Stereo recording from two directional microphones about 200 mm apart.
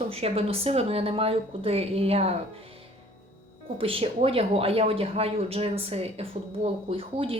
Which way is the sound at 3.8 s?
30° right (ahead or behind).